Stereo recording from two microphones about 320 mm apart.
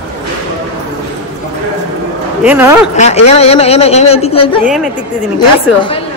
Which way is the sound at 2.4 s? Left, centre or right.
Centre.